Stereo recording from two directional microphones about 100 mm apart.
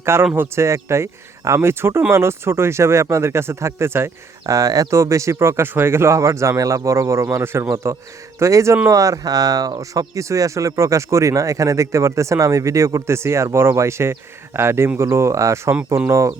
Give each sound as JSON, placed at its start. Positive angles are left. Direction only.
{"t": 0.0, "sound": "speech", "side_deg": -25}
{"t": 4.4, "sound": "speech", "side_deg": -35}